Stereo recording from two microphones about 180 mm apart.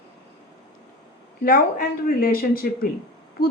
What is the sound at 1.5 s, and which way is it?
Speech, 55° left (ahead or behind).